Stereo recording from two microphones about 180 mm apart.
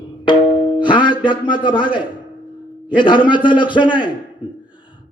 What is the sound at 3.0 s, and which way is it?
A man's voice, 25° left (ahead or behind).